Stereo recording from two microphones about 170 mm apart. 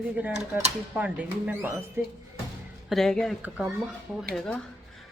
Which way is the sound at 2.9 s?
Centre (ahead or behind).